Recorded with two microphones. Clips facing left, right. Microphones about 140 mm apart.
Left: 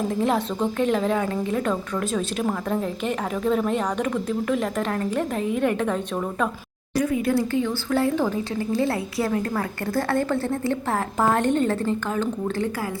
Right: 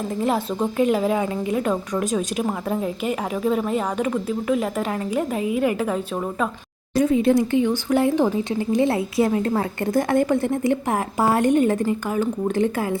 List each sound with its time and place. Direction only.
0.1 s a woman's voice: centre (ahead or behind)
6.9 s a woman's voice: 25° right (ahead or behind)